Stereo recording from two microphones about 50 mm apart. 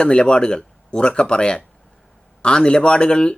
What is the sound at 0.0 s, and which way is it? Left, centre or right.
A man's voice, centre.